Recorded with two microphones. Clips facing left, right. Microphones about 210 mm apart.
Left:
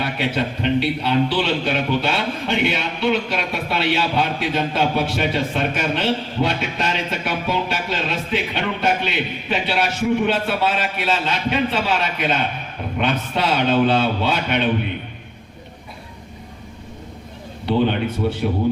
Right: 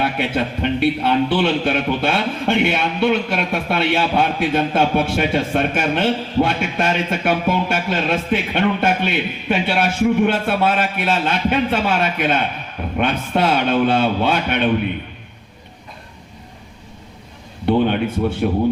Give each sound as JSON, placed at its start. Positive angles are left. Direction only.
{"t": 0.0, "sound": "a man's voice", "side_deg": -55}
{"t": 17.7, "sound": "a man's voice", "side_deg": -55}